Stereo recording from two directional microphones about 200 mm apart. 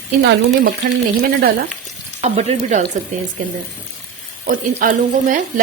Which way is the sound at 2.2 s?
35° right (ahead or behind).